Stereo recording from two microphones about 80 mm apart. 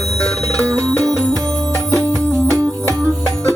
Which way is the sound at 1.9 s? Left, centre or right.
Right.